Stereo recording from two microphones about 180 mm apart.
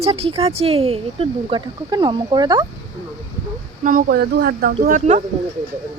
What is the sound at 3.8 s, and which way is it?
Speech, 50° right (ahead or behind).